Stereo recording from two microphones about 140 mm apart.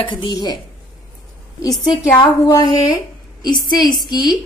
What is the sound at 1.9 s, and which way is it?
A woman's voice, 30° left (ahead or behind).